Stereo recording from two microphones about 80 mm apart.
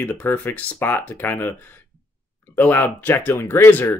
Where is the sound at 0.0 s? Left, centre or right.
Left.